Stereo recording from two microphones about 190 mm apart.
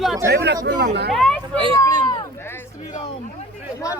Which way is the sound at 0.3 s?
65° right (ahead or behind).